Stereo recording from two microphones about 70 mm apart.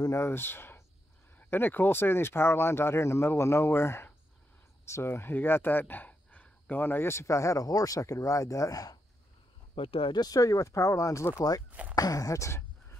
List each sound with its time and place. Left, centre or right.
0.1 s speech: left
10.1 s speech: left
11.3 s speech: left